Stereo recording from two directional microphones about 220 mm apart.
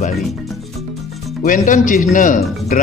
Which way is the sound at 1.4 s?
35° left (ahead or behind).